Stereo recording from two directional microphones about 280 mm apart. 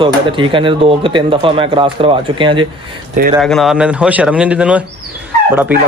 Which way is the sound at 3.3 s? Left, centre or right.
Centre.